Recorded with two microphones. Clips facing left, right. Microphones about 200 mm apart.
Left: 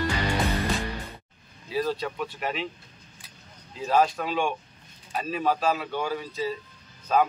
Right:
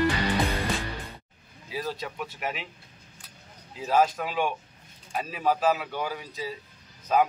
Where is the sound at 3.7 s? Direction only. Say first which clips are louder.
Left 1 dB; 10° right (ahead or behind).